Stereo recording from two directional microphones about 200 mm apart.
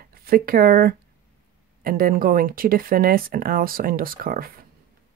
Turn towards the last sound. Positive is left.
turn(degrees=-45)  # may be behind; listen again after turning